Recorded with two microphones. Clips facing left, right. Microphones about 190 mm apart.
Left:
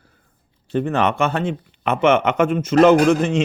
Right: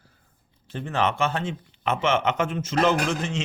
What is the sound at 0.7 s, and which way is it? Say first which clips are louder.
Speech: left 7 dB; 60° left (ahead or behind).